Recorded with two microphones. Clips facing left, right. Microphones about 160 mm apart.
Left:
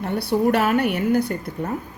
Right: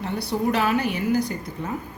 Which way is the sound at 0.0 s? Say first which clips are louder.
Left 5 dB; 60° left (ahead or behind).